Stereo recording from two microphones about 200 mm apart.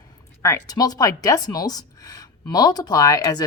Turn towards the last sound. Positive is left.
turn(degrees=15)  # may be behind; listen again after turning